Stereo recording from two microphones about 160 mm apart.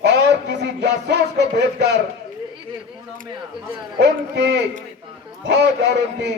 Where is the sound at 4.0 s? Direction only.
90° right.